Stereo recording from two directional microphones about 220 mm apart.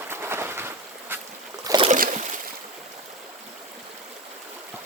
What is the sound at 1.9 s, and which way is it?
Boat, 35° right (ahead or behind).